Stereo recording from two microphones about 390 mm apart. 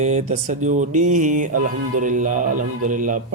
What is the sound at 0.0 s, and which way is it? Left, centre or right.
Music, centre.